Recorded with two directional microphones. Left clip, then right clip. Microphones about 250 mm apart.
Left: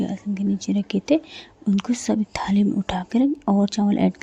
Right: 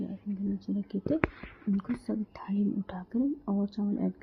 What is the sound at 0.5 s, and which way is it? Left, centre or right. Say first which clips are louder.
Speech: left 11 dB; left.